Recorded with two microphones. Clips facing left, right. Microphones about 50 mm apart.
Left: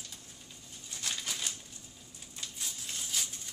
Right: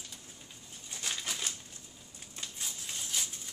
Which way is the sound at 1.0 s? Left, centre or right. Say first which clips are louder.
Right 1 dB; centre.